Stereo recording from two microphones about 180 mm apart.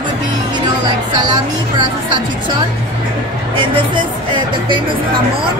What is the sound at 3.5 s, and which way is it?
Speech, 25° right (ahead or behind).